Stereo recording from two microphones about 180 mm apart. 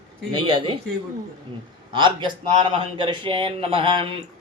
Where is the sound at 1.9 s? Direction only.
25° right (ahead or behind).